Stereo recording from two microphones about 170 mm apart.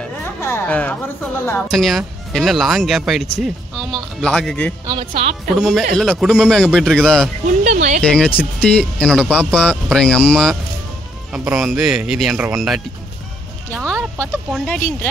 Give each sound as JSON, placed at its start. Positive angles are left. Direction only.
{"t": 0.2, "sound": "speech", "side_deg": 15}
{"t": 1.7, "sound": "speech", "side_deg": 0}
{"t": 4.8, "sound": "speech", "side_deg": -30}
{"t": 5.6, "sound": "speech", "side_deg": 0}
{"t": 7.4, "sound": "speech", "side_deg": -45}
{"t": 8.4, "sound": "speech", "side_deg": 10}
{"t": 14.1, "sound": "speech", "side_deg": 5}